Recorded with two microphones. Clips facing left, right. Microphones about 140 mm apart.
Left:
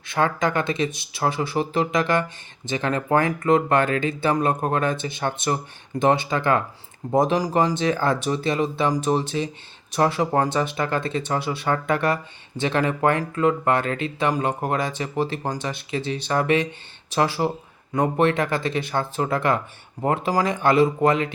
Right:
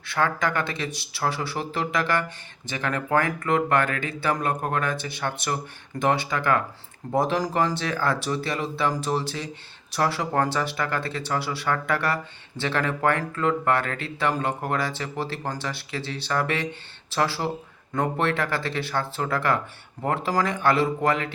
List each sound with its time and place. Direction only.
0.1 s speech: 20° left (ahead or behind)